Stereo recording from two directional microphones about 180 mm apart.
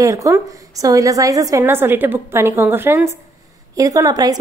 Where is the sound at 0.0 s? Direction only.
15° right (ahead or behind).